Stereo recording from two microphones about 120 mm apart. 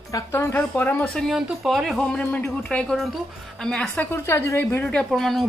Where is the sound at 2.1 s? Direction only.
10° left (ahead or behind).